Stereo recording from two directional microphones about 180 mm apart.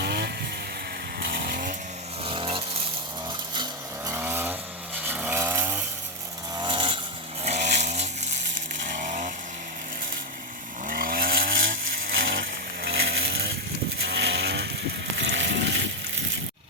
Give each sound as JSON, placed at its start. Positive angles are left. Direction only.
{"t": 0.0, "sound": "vehicle", "side_deg": -65}
{"t": 2.2, "sound": "vehicle", "side_deg": -30}
{"t": 4.1, "sound": "vehicle", "side_deg": -10}
{"t": 5.0, "sound": "chainsaw", "side_deg": -10}
{"t": 6.6, "sound": "vehicle", "side_deg": -25}
{"t": 7.4, "sound": "chainsaw", "side_deg": -40}
{"t": 10.8, "sound": "chainsaw", "side_deg": -55}
{"t": 12.3, "sound": "vehicle", "side_deg": -80}
{"t": 15.1, "sound": "vehicle", "side_deg": -90}